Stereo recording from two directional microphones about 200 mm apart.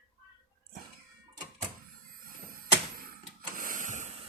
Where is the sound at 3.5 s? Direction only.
45° right (ahead or behind).